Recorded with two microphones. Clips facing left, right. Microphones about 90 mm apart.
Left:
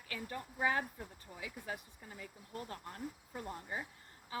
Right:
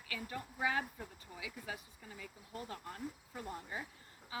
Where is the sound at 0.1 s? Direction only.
40° left (ahead or behind).